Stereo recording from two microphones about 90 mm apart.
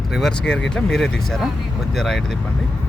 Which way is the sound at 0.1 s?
5° left (ahead or behind).